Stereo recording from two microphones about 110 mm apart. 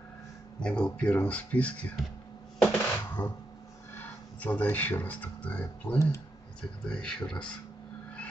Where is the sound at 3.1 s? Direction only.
20° left (ahead or behind).